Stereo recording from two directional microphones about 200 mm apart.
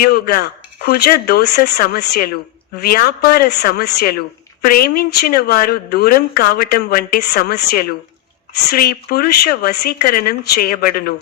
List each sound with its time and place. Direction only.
0.0 s speech: 50° left (ahead or behind)